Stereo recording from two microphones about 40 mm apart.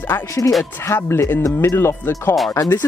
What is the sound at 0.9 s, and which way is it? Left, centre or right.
Speech, left.